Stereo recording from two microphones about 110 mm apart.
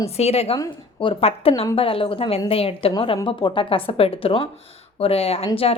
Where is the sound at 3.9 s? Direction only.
60° left (ahead or behind).